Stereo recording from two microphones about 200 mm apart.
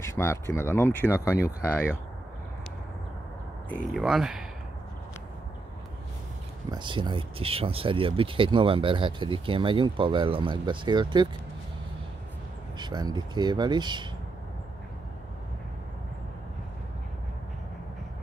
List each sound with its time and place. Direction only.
0.0 s speech: 15° left (ahead or behind)
3.9 s speech: centre (ahead or behind)
6.7 s speech: 25° right (ahead or behind)
12.7 s speech: 20° right (ahead or behind)